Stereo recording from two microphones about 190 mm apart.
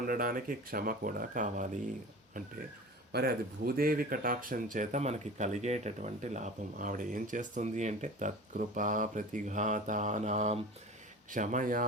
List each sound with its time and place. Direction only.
0.0 s speech: 50° right (ahead or behind)
3.1 s speech: 55° right (ahead or behind)